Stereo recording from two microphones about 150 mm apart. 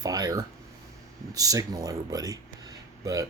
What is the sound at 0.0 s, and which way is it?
Speech, 25° right (ahead or behind).